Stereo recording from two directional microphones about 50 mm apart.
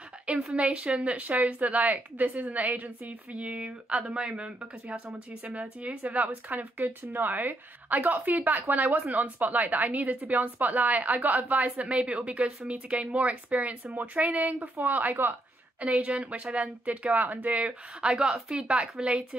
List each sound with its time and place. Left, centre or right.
0.6 s a woman's voice: right
18.1 s speech: centre
18.7 s speech: right